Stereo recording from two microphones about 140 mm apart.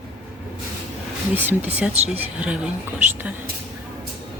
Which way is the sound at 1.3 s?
15° right (ahead or behind).